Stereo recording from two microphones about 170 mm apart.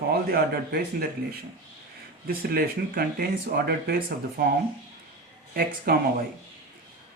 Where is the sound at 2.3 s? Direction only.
65° right (ahead or behind).